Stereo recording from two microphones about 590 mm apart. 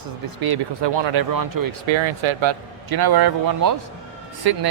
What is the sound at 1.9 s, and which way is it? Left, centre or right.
Speech, right.